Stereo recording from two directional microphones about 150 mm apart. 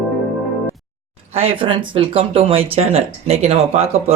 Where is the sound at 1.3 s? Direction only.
40° right (ahead or behind).